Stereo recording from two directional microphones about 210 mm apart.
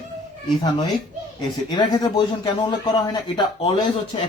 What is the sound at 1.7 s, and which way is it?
Speech, 20° left (ahead or behind).